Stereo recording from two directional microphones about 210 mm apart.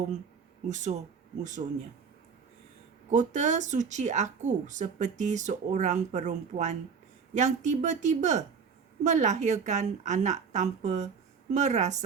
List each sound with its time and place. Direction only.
0.7 s speech: 35° right (ahead or behind)
3.1 s speech: 35° right (ahead or behind)